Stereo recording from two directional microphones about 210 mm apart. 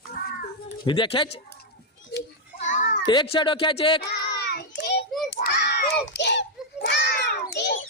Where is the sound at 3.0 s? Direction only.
20° left (ahead or behind).